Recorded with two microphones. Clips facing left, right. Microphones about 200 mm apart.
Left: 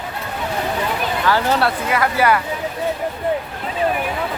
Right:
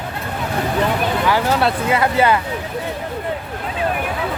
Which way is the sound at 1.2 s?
20° right (ahead or behind).